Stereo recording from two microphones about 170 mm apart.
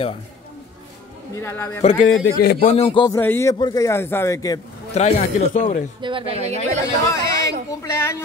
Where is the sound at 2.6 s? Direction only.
35° left (ahead or behind).